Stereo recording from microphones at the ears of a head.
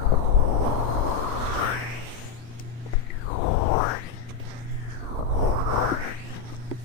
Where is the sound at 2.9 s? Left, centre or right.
Left.